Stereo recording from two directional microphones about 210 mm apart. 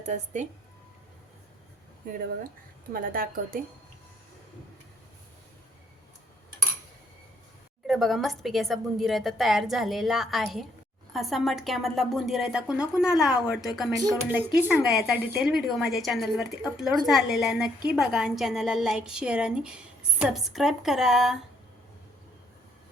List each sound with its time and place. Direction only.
2.0 s a woman's voice: 40° right (ahead or behind)
7.9 s a woman's voice: centre (ahead or behind)
14.0 s a woman's voice: 10° right (ahead or behind)